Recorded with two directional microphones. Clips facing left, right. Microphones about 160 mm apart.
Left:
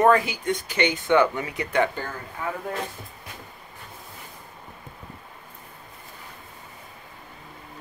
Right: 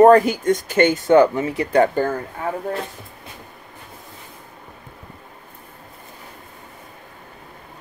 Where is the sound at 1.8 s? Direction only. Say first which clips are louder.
Right 9 dB; 45° right (ahead or behind).